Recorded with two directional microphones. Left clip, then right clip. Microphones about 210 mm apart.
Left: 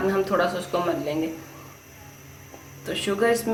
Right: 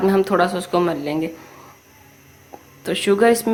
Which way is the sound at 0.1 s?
45° right (ahead or behind).